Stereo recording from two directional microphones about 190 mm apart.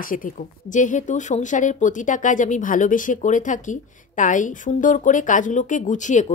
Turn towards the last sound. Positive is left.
turn(degrees=40)  # may be behind; listen again after turning